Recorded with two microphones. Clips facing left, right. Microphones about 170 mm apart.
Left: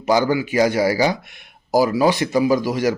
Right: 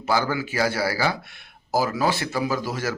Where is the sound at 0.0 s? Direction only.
15° left (ahead or behind).